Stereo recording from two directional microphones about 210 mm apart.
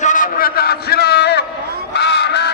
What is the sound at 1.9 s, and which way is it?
Crow, 55° left (ahead or behind).